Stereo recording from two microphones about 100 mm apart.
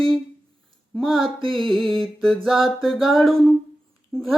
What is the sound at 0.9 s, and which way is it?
Music, centre (ahead or behind).